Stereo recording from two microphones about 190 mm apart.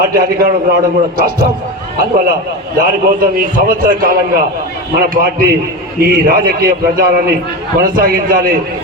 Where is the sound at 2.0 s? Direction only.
50° right (ahead or behind).